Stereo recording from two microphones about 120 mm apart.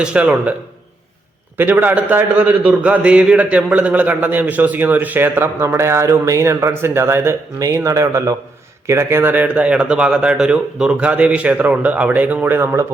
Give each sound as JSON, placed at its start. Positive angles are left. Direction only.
{"t": 0.0, "sound": "a man's voice", "side_deg": -10}
{"t": 1.5, "sound": "a man's voice", "side_deg": -15}